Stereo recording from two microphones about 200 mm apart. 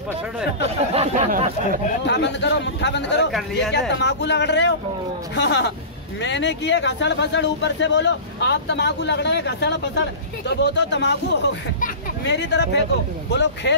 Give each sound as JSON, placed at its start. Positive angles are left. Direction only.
{"t": 0.9, "sound": "speech", "side_deg": -30}
{"t": 2.0, "sound": "a man's voice", "side_deg": 60}